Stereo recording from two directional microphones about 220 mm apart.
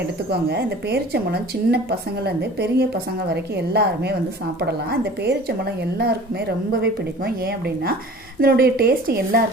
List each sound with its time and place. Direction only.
0.4 s a woman's voice: 45° right (ahead or behind)